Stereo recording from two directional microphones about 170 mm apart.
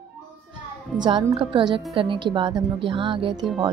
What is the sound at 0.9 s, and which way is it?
Speech, 25° right (ahead or behind).